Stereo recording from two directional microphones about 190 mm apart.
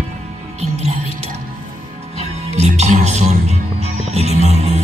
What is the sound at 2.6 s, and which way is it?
Music, 35° right (ahead or behind).